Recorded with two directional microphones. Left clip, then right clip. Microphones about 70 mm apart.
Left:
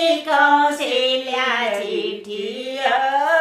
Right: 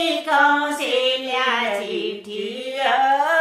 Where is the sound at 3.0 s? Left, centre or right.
Right.